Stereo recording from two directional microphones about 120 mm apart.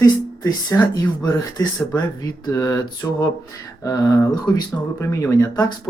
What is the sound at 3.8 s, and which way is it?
Speech, 25° left (ahead or behind).